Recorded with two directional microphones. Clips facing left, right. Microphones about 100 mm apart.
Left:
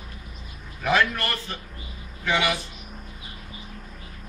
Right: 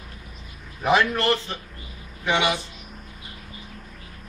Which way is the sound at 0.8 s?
25° right (ahead or behind).